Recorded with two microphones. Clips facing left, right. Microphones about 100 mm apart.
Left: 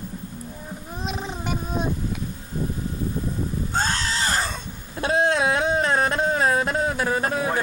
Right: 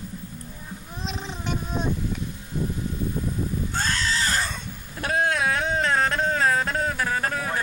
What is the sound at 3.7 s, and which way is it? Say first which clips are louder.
Screaming: left 2 dB; 35° left (ahead or behind).